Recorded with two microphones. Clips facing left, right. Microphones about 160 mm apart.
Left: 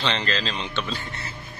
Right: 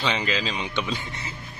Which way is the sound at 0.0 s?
10° right (ahead or behind).